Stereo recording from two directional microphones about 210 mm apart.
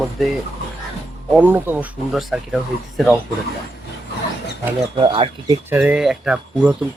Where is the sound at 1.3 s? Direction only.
10° right (ahead or behind).